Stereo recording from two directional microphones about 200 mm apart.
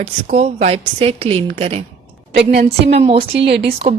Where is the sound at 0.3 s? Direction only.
30° right (ahead or behind).